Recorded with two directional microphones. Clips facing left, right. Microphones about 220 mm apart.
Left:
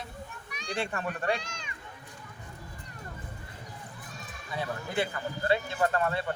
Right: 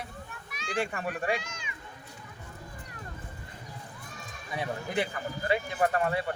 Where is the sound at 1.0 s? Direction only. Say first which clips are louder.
Even; 10° right (ahead or behind).